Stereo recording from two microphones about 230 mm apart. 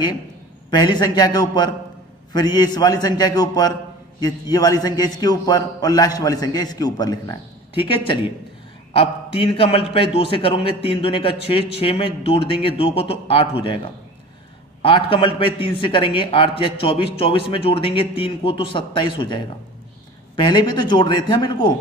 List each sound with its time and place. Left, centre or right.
0.7 s a man's voice: centre